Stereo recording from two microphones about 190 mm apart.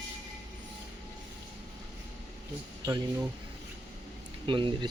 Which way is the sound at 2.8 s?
20° right (ahead or behind).